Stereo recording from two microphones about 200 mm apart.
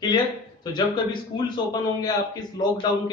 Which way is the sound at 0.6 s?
20° left (ahead or behind).